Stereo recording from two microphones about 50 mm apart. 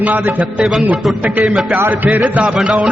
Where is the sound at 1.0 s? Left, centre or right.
Centre.